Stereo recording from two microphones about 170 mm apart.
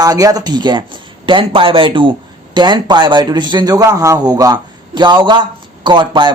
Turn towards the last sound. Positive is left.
turn(degrees=-25)  # may be behind; listen again after turning